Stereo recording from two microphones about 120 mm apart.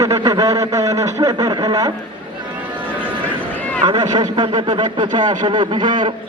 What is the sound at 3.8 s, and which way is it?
A man's voice, 40° right (ahead or behind).